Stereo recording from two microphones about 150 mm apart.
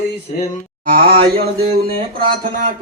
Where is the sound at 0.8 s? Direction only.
85° right.